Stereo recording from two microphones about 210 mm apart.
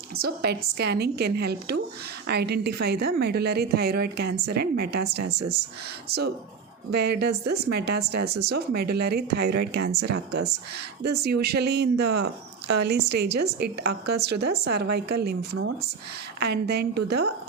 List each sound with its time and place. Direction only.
0.2 s speech: 50° right (ahead or behind)